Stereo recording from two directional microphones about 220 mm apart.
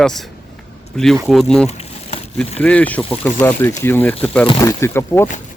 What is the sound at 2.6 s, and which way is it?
Speech, 5° left (ahead or behind).